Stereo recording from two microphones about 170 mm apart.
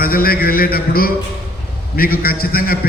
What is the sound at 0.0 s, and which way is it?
A man's voice, 60° left (ahead or behind).